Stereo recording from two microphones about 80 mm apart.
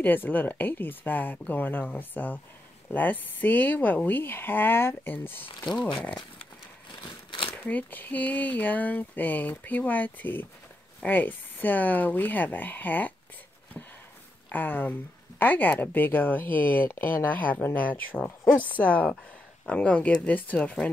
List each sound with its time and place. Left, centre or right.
0.0 s speech: left
5.8 s speech: left
7.5 s speech: left
14.5 s speech: left